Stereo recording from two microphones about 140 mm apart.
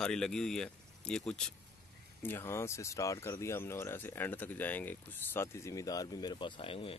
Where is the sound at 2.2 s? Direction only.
20° left (ahead or behind); by 7.0 s 40° left (ahead or behind).